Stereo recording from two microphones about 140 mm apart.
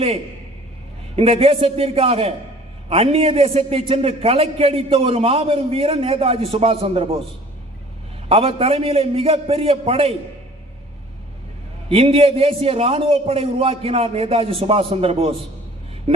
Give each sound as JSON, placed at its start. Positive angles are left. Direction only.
{"t": 1.1, "sound": "a man's voice", "side_deg": -45}
{"t": 8.3, "sound": "a man's voice", "side_deg": -45}
{"t": 11.9, "sound": "a man's voice", "side_deg": -40}